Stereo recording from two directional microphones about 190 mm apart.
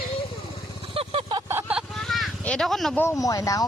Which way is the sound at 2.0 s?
Centre (ahead or behind).